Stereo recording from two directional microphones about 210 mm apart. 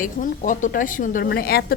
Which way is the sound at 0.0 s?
40° left (ahead or behind).